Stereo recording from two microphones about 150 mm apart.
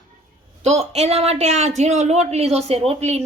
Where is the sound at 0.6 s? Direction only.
45° right (ahead or behind).